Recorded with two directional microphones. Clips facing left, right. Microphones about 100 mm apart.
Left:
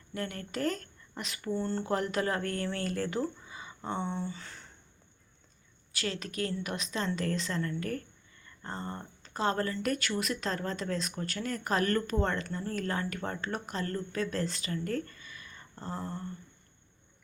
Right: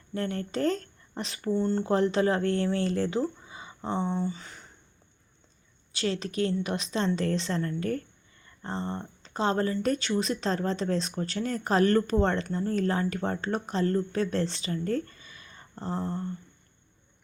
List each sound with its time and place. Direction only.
0.1 s speech: 30° right (ahead or behind)
1.5 s speech: 20° right (ahead or behind)
5.9 s a woman's voice: 30° right (ahead or behind)